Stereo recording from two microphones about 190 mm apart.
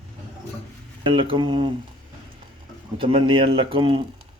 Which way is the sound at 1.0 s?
25° right (ahead or behind).